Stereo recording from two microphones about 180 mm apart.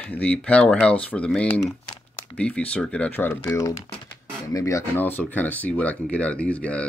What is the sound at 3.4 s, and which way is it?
Speech, 20° left (ahead or behind).